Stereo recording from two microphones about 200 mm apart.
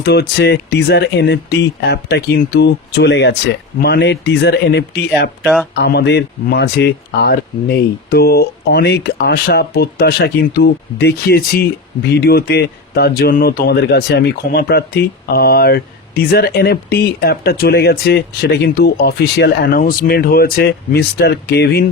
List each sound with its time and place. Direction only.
0.0 s speech: 55° left (ahead or behind)